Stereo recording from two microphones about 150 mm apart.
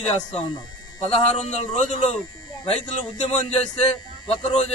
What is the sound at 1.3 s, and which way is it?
A man's voice, 45° left (ahead or behind).